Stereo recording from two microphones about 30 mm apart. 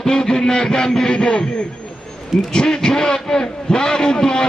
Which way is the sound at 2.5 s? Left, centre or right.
Left.